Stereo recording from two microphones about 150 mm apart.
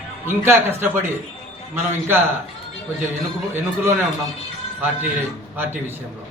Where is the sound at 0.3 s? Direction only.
15° right (ahead or behind).